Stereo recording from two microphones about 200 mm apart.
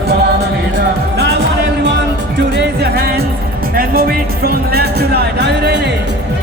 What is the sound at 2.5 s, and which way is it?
Music, 55° right (ahead or behind).